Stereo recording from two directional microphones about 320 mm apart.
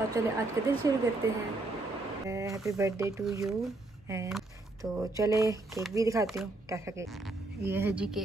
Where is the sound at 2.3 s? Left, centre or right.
Centre.